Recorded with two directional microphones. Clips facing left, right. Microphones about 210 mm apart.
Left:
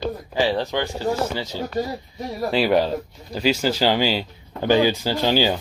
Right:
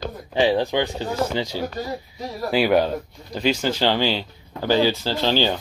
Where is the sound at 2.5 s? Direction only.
Centre (ahead or behind).